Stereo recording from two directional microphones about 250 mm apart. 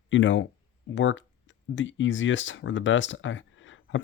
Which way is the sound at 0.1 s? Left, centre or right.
Left.